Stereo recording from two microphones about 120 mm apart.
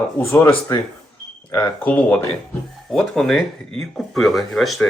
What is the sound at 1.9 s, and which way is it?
Speech, 10° left (ahead or behind).